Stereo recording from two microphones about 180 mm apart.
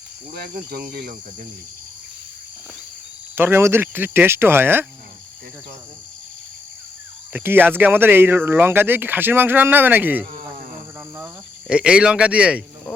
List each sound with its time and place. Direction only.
0.3 s speech: 60° right (ahead or behind)
3.3 s speech: 10° right (ahead or behind)
7.3 s speech: 10° right (ahead or behind)
11.7 s speech: 5° right (ahead or behind)